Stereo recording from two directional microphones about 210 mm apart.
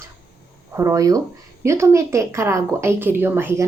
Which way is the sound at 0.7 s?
15° right (ahead or behind).